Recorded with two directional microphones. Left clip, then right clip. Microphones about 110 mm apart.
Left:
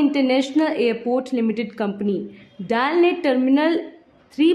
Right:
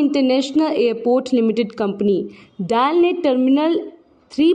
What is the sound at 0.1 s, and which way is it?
Speech, 35° right (ahead or behind).